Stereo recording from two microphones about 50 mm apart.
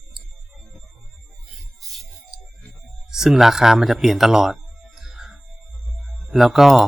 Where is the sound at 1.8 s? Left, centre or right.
Centre.